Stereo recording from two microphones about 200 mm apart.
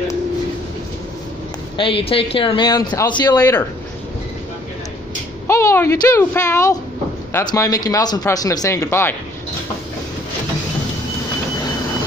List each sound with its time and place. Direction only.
1.8 s speech: 25° left (ahead or behind)
5.5 s speech: 15° left (ahead or behind)